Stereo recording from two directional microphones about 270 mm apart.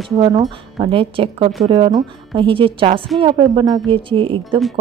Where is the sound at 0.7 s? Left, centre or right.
Centre.